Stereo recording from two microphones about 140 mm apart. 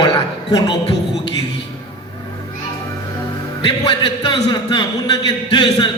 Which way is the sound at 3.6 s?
40° left (ahead or behind).